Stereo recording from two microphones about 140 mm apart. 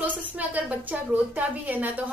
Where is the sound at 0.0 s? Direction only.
10° right (ahead or behind).